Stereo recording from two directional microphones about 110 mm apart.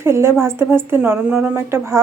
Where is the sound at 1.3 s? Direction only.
10° right (ahead or behind).